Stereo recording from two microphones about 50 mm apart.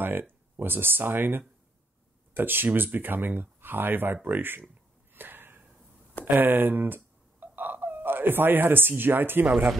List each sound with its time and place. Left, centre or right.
0.0 s speech: right
5.1 s a sound: right
6.4 s speech: right
9.5 s speech: right